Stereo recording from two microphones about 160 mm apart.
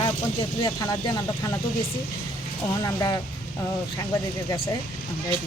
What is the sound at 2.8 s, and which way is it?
Speech, 20° left (ahead or behind).